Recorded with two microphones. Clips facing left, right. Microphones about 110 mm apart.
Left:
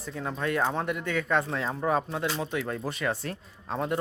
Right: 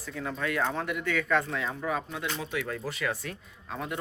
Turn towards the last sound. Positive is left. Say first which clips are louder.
# left 5 dB
turn(degrees=35)  # may be behind; listen again after turning